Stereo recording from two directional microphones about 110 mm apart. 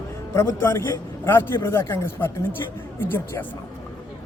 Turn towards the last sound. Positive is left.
turn(degrees=20)  # may be behind; listen again after turning